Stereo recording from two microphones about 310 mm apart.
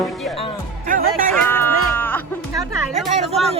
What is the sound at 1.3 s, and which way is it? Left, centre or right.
Music, centre.